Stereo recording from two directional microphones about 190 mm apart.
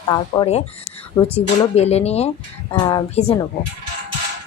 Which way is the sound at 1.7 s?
35° left (ahead or behind).